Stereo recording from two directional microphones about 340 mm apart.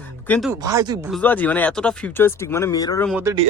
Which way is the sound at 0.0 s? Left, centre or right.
Centre.